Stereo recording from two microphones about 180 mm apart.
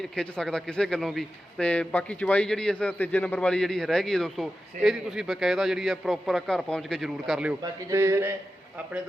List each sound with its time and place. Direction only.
0.2 s a man's voice: 5° left (ahead or behind)
7.6 s a man's voice: 15° right (ahead or behind)